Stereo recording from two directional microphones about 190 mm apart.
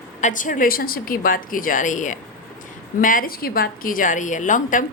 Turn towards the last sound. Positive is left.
turn(degrees=45)  # may be behind; listen again after turning